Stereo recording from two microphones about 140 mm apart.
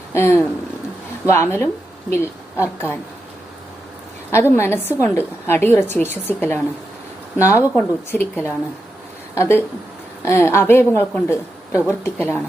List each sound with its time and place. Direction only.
0.1 s a sound: 20° left (ahead or behind)
1.3 s a woman's voice: 20° left (ahead or behind)
4.3 s a woman's voice: 20° left (ahead or behind)